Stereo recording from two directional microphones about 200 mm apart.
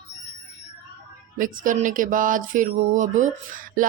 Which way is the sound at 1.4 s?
40° right (ahead or behind).